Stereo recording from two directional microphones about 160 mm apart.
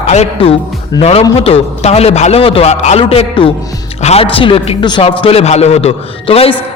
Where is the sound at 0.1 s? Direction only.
45° left (ahead or behind).